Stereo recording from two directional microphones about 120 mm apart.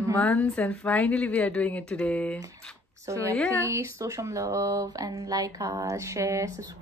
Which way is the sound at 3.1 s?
30° right (ahead or behind).